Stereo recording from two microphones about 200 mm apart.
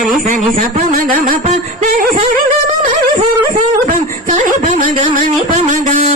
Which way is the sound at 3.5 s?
40° right (ahead or behind).